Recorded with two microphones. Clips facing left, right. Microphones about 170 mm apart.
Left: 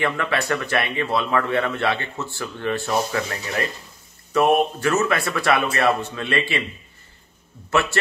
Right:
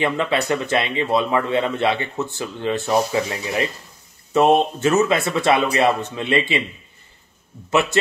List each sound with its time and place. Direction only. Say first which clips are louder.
0.0 s a man's voice: right 3 dB; 20° right (ahead or behind)
7.7 s a man's voice: right 3 dB; 20° right (ahead or behind)